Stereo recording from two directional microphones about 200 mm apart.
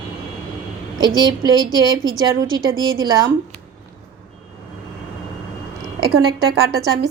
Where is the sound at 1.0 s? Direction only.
20° right (ahead or behind).